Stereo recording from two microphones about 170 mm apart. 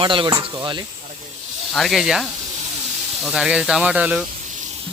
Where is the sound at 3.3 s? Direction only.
5° right (ahead or behind).